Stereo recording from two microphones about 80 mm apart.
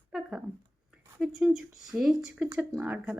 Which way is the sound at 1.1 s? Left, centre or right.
Centre.